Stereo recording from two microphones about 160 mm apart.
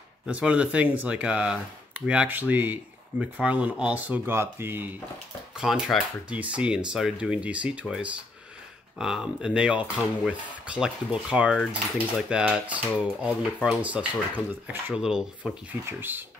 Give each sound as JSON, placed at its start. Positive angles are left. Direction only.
{"t": 0.3, "sound": "speech", "side_deg": -5}
{"t": 5.6, "sound": "speech", "side_deg": 0}